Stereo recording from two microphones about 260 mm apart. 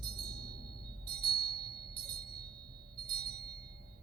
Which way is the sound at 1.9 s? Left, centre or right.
Right.